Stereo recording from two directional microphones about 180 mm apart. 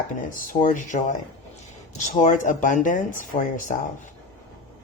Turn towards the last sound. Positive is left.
turn(degrees=45)  # may be behind; listen again after turning